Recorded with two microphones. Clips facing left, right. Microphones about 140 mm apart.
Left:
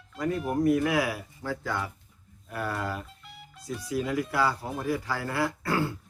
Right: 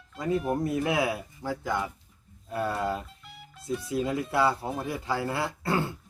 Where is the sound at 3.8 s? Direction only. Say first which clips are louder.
Left 1 dB; 25° right (ahead or behind).